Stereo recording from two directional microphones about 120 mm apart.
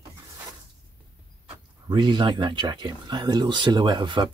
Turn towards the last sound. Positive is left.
turn(degrees=-40)  # may be behind; listen again after turning